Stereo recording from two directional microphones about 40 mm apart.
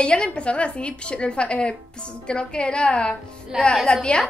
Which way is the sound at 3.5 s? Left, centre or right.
Centre.